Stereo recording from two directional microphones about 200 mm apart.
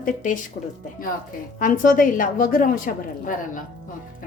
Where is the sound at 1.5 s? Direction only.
45° left (ahead or behind).